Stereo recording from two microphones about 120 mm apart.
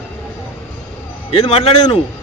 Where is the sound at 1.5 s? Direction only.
55° left (ahead or behind).